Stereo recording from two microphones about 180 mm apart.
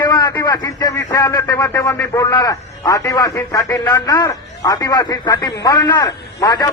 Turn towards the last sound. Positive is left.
turn(degrees=20)  # may be behind; listen again after turning